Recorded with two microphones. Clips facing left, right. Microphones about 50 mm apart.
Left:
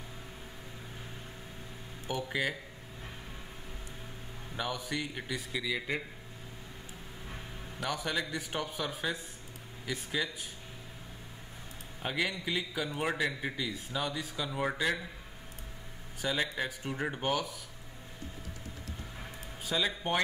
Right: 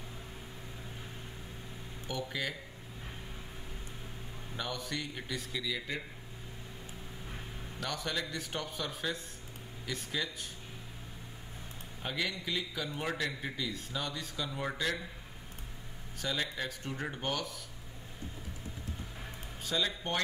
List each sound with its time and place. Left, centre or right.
2.0 s a man's voice: centre
4.6 s a man's voice: centre
7.8 s a man's voice: centre
12.0 s a man's voice: centre
16.2 s a man's voice: centre
19.6 s speech: centre